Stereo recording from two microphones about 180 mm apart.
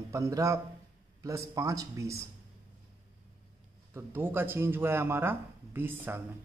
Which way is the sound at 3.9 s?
10° right (ahead or behind).